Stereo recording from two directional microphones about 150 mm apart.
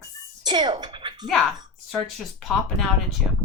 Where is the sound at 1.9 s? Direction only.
Centre (ahead or behind).